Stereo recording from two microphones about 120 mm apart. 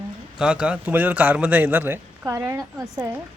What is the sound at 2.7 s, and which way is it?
Speech, centre (ahead or behind).